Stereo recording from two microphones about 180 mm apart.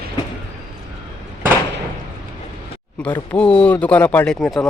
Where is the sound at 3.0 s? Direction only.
5° left (ahead or behind).